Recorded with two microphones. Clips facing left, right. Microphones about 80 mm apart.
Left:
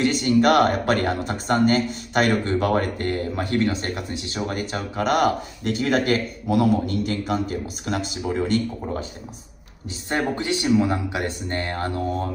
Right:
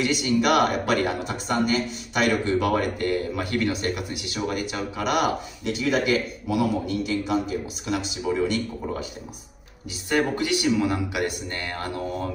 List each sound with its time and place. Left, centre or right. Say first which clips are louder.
0.0 s speech: left 4 dB; left
10.0 s speech: right 1 dB; left